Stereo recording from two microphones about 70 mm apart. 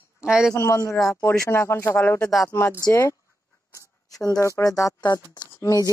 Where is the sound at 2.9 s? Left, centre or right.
Left.